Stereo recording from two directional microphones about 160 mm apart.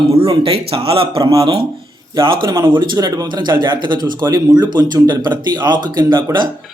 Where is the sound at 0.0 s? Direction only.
40° right (ahead or behind).